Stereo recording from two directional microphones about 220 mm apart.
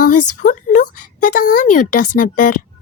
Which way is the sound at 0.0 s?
35° left (ahead or behind).